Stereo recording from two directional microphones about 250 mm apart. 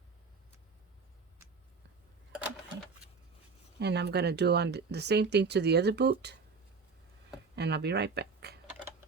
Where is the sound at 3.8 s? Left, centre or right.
Right.